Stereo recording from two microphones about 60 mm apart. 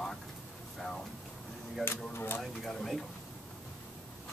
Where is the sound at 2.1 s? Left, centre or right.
Left.